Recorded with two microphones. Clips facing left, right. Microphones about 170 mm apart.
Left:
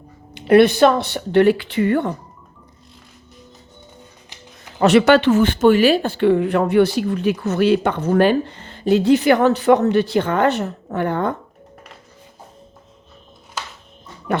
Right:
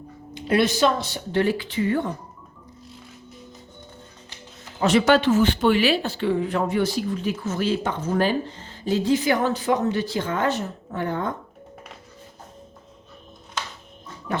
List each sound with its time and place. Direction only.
0.3 s speech: 65° left (ahead or behind)
4.8 s speech: 65° left (ahead or behind)
14.3 s a sound: 65° left (ahead or behind)